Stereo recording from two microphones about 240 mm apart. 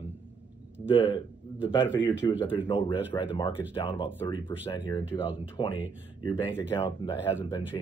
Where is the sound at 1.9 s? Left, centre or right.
Centre.